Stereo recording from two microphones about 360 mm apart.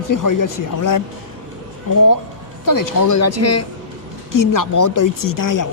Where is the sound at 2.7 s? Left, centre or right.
Left.